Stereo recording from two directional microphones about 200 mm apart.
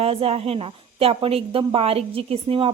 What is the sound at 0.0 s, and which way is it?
A woman's voice, 30° right (ahead or behind).